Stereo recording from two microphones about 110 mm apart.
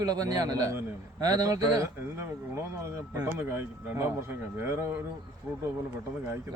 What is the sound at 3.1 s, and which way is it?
Speech, 20° right (ahead or behind).